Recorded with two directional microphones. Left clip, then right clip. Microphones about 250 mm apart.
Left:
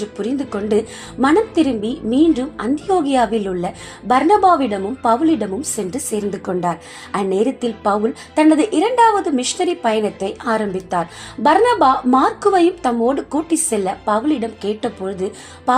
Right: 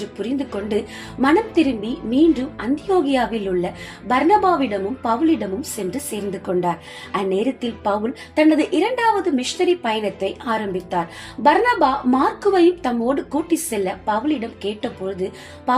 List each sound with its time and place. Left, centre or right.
0.2 s a woman's voice: left